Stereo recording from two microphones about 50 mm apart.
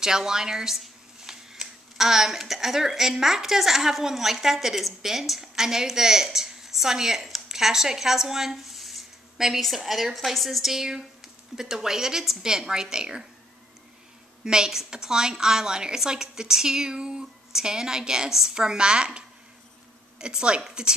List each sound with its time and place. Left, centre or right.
0.0 s a woman's voice: centre
14.4 s a woman's voice: centre